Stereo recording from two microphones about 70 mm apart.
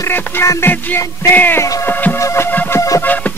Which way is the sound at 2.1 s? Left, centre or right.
Left.